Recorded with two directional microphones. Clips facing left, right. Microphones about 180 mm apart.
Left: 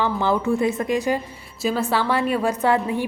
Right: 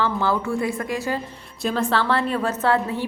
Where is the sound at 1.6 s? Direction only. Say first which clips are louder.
Even; 5° left (ahead or behind).